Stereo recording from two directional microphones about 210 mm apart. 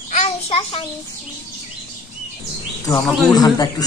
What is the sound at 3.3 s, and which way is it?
Speech, 20° left (ahead or behind).